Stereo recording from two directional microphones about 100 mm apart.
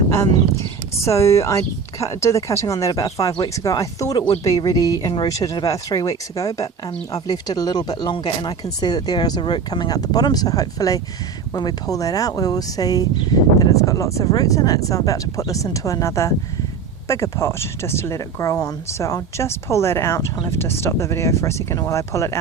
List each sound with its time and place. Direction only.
0.9 s speech: 30° left (ahead or behind)